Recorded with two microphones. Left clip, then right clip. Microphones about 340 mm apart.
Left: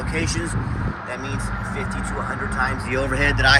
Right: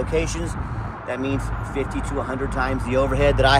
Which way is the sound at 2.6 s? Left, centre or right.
Centre.